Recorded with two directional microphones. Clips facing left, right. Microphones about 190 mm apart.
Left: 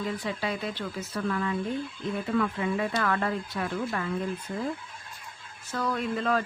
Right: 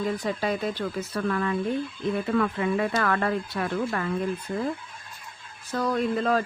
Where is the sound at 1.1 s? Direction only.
60° right (ahead or behind).